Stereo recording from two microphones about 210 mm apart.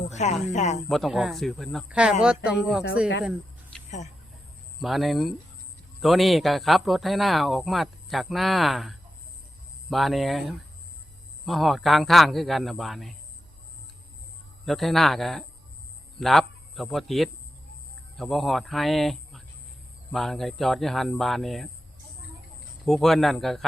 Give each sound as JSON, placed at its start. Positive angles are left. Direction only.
{"t": 0.1, "sound": "speech", "side_deg": 35}
{"t": 0.9, "sound": "speech", "side_deg": 0}
{"t": 4.8, "sound": "speech", "side_deg": 0}
{"t": 14.6, "sound": "a man's voice", "side_deg": 0}
{"t": 22.9, "sound": "speech", "side_deg": 0}